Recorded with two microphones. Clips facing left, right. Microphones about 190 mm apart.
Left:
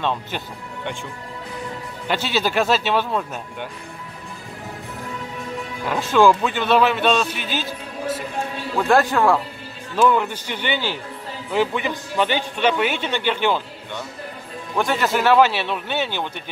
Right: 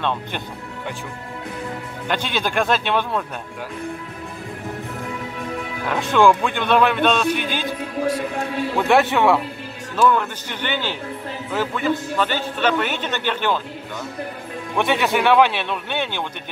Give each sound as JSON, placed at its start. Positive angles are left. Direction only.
{"t": 0.0, "sound": "a man's voice", "side_deg": 10}
{"t": 2.0, "sound": "a man's voice", "side_deg": 5}
{"t": 6.1, "sound": "a man's voice", "side_deg": 5}
{"t": 7.3, "sound": "a man's voice", "side_deg": -55}
{"t": 8.7, "sound": "a man's voice", "side_deg": 0}
{"t": 10.0, "sound": "a man's voice", "side_deg": 10}
{"t": 14.8, "sound": "a man's voice", "side_deg": 0}